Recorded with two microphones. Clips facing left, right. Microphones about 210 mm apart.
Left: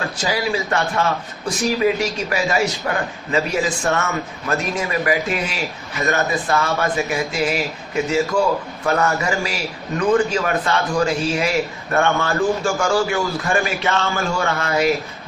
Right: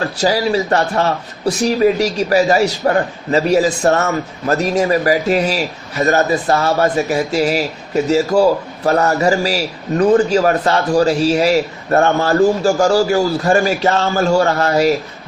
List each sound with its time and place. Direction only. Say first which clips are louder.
0.0 s speech: right 6 dB; 40° right (ahead or behind)